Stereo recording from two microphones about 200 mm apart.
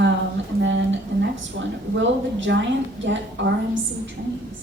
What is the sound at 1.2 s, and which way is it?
A woman's voice, 65° right (ahead or behind).